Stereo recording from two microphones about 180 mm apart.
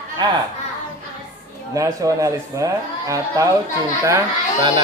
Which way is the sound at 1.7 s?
20° right (ahead or behind).